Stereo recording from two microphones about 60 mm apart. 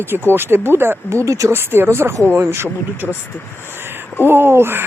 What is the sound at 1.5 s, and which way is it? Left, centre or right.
Speech, right.